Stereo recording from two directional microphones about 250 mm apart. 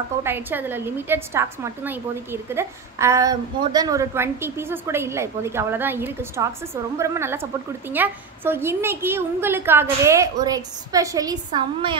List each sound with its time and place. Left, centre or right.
0.2 s a woman's voice: centre